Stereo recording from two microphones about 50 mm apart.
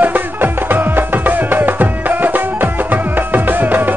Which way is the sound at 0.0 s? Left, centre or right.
Right.